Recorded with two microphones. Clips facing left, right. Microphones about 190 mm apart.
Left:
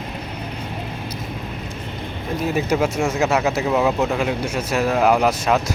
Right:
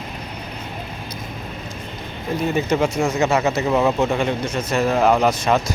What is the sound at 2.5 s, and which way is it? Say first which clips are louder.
Speech: even; 5° left (ahead or behind).